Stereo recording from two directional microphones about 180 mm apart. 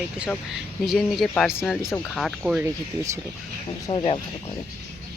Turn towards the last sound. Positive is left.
turn(degrees=30)  # may be behind; listen again after turning